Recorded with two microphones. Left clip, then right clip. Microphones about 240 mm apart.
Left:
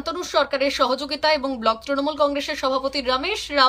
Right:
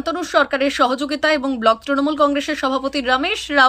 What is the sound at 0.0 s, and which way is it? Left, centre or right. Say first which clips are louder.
Speech: right 4 dB; centre.